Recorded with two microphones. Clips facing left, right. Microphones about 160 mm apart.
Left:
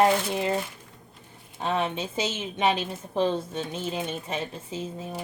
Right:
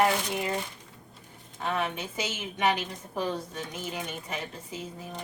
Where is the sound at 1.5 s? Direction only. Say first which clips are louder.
Left 3 dB; 25° left (ahead or behind).